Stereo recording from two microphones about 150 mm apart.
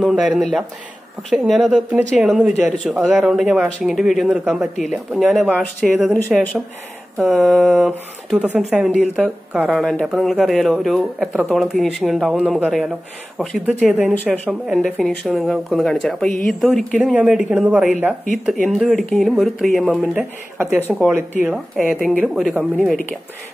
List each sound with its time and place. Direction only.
0.0 s speech: centre (ahead or behind)
13.8 s speech: 10° right (ahead or behind)
14.1 s speech: 10° left (ahead or behind)
17.0 s speech: 10° right (ahead or behind)
18.3 s speech: centre (ahead or behind)
20.2 s speech: 15° right (ahead or behind)